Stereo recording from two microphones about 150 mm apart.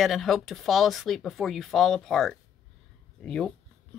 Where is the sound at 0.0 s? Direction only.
Centre (ahead or behind).